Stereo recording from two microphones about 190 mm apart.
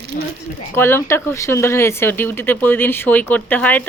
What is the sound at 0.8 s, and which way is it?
Speech, 10° left (ahead or behind).